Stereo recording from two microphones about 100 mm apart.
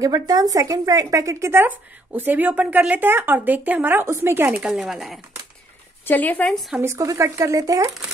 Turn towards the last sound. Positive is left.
turn(degrees=-35)  # may be behind; listen again after turning